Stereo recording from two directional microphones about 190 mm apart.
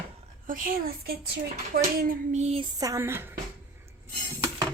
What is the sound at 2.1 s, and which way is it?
A woman's voice, 40° right (ahead or behind).